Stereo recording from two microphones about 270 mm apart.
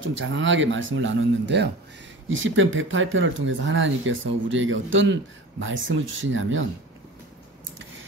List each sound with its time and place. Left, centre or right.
0.0 s speech: right